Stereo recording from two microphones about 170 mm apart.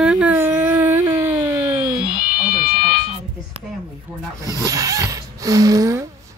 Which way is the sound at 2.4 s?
60° left (ahead or behind).